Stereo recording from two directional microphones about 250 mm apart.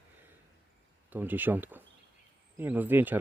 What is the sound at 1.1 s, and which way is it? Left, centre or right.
Speech, centre.